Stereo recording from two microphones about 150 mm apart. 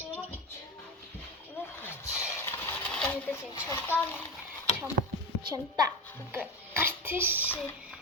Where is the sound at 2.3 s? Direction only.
15° left (ahead or behind).